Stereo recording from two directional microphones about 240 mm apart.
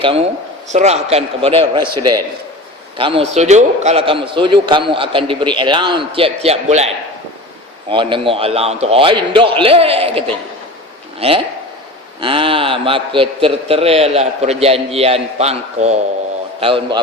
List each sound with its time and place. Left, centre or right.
0.0 s a man's voice: right